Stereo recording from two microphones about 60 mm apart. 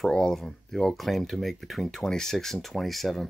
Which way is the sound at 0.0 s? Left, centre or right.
Centre.